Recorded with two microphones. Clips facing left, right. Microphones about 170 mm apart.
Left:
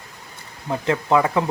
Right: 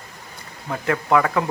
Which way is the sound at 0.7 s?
20° left (ahead or behind).